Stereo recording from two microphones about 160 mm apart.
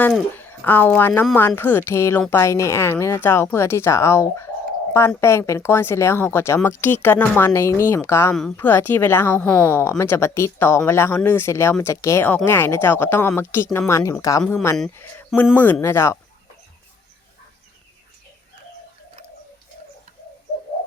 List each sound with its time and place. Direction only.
0.0 s speech: 10° left (ahead or behind)